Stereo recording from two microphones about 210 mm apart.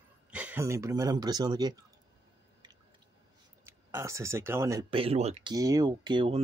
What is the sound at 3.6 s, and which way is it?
Speech, 10° right (ahead or behind).